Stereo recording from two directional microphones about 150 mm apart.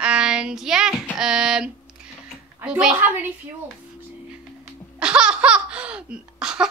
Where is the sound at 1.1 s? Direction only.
5° right (ahead or behind).